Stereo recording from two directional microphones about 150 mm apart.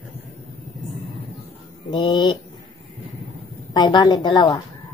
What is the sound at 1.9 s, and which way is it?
Speech, 30° left (ahead or behind).